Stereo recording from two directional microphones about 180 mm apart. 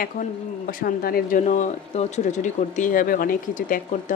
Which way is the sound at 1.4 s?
40° left (ahead or behind).